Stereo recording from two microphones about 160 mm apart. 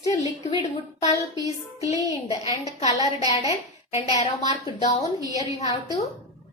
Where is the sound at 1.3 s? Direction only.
20° right (ahead or behind).